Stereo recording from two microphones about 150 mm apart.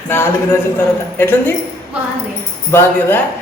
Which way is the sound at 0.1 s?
15° left (ahead or behind).